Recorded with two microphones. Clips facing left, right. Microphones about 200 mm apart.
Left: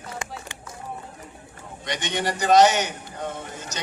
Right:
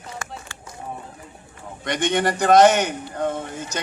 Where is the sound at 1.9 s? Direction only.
55° right (ahead or behind).